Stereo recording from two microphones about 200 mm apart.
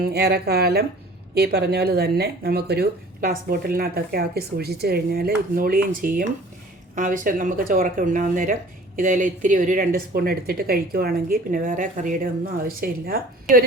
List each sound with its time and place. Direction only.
0.0 s speech: 50° right (ahead or behind)